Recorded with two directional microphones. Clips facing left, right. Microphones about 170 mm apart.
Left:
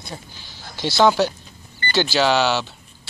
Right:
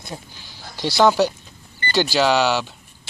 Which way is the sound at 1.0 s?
Centre (ahead or behind).